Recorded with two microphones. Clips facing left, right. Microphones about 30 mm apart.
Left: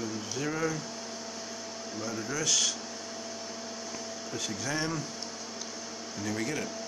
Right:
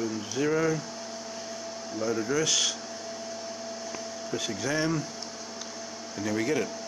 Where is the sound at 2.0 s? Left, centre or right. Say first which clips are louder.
Right 7 dB; centre.